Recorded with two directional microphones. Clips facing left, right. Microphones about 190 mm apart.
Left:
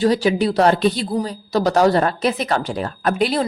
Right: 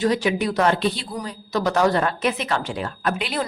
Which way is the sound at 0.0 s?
35° left (ahead or behind).